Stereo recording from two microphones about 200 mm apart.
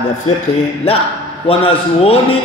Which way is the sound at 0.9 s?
30° left (ahead or behind).